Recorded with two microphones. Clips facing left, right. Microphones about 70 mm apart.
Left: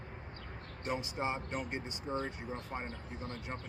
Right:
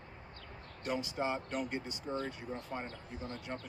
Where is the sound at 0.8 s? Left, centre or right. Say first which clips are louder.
Right 1 dB; left.